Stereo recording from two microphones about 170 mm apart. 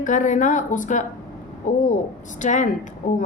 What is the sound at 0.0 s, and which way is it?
A woman's voice, 45° left (ahead or behind).